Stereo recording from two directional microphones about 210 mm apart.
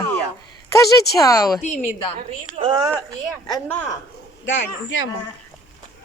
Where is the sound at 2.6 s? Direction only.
35° right (ahead or behind).